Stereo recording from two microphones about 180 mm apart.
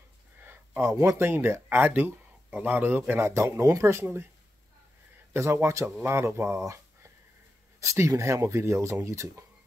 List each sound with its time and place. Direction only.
0.4 s speech: 10° right (ahead or behind)
5.3 s speech: 15° right (ahead or behind)